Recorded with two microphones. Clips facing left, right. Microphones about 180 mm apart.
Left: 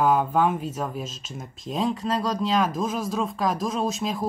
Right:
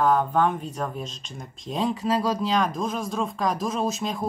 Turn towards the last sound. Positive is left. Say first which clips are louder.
# even
turn(degrees=0)  # may be behind; listen again after turning